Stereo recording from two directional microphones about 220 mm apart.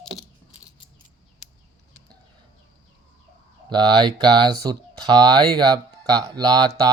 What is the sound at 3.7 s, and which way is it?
Speech, 20° right (ahead or behind).